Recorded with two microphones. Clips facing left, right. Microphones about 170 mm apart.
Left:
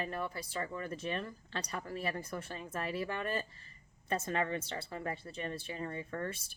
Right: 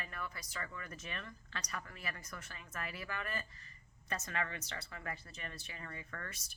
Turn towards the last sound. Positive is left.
turn(degrees=30)  # may be behind; listen again after turning